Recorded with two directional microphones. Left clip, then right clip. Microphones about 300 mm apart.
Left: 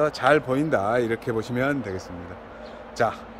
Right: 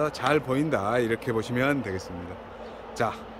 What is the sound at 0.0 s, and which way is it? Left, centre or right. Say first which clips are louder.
Speech: left 5 dB; centre.